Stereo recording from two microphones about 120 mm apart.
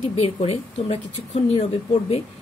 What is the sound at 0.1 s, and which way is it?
Speech, 55° left (ahead or behind).